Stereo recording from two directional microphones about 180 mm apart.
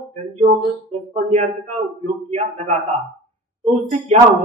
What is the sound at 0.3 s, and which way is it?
Speech, 35° right (ahead or behind).